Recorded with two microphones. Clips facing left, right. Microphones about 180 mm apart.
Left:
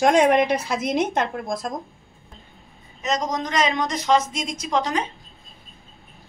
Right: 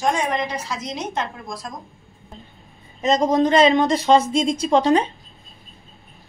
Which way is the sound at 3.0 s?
30° right (ahead or behind).